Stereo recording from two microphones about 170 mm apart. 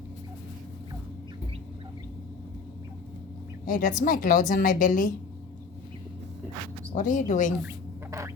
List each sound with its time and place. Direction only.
3.7 s a woman's voice: 50° left (ahead or behind)
6.9 s a woman's voice: 50° left (ahead or behind)